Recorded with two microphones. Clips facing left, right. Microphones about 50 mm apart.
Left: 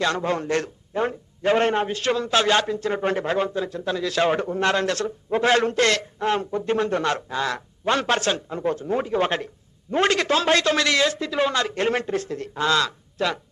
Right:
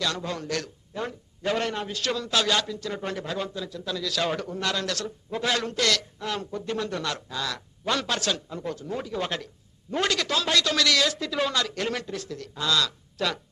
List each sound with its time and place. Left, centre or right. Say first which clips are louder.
0.0 s a man's voice: left 7 dB; left